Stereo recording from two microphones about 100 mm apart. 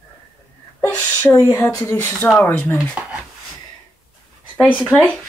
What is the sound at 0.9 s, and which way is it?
Speech, 15° left (ahead or behind).